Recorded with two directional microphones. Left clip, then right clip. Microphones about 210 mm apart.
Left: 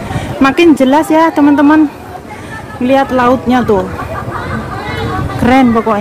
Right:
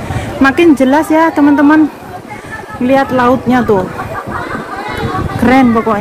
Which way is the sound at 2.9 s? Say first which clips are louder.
Even; 5° right (ahead or behind).